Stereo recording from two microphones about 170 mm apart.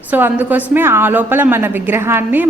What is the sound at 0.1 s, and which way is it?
A woman's voice, 10° right (ahead or behind).